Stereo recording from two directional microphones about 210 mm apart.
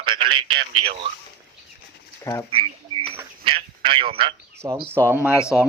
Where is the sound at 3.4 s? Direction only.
25° right (ahead or behind).